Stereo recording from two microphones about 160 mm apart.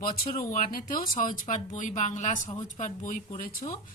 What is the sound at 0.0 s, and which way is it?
A woman's voice, 65° left (ahead or behind).